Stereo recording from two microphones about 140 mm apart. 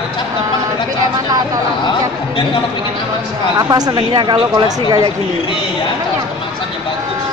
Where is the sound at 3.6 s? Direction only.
30° right (ahead or behind).